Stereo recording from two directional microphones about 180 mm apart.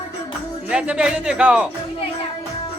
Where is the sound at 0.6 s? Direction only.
5° right (ahead or behind).